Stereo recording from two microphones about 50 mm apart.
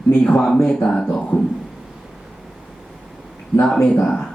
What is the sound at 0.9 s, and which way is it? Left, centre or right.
Speech, centre.